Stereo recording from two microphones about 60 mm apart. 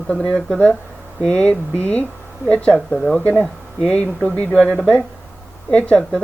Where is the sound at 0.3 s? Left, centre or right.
Centre.